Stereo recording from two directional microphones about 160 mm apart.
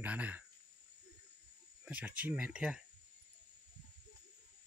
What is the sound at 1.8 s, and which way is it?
Speech, 10° right (ahead or behind).